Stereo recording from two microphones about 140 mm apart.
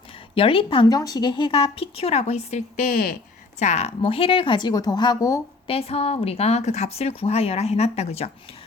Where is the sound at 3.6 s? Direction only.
55° left (ahead or behind); by 5.4 s 25° left (ahead or behind).